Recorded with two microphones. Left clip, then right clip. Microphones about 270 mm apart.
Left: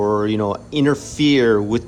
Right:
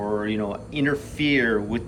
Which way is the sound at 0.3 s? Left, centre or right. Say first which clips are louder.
Left 7 dB; centre.